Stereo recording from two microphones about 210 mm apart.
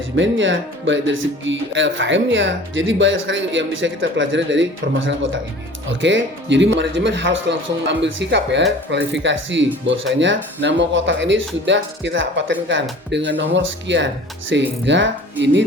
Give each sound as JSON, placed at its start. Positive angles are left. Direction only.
{"t": 0.2, "sound": "speech", "side_deg": -60}